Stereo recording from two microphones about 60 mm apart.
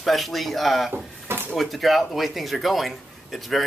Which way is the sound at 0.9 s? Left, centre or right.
Right.